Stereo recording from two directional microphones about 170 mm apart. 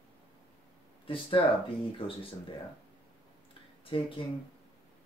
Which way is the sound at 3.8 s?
30° left (ahead or behind).